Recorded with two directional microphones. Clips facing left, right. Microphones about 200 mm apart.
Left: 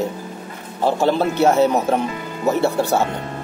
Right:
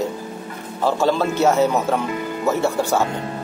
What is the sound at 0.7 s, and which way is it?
A man's voice, 20° left (ahead or behind).